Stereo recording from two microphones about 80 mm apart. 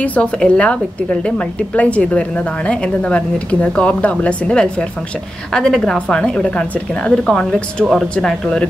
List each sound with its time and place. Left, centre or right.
0.0 s a woman's voice: centre
1.8 s a woman's voice: centre
7.9 s speech: centre